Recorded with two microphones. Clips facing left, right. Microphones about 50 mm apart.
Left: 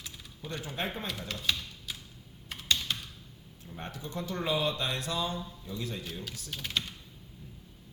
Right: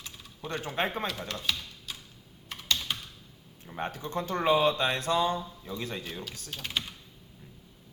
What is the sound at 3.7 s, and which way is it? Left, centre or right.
Speech, right.